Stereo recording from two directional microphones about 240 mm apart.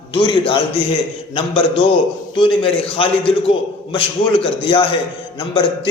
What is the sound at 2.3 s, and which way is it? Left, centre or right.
A man's voice, left.